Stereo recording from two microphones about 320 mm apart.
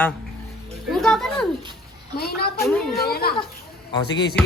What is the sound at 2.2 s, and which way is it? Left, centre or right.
Speech, left.